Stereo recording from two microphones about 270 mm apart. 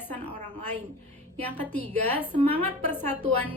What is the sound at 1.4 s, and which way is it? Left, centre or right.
A woman's voice, centre.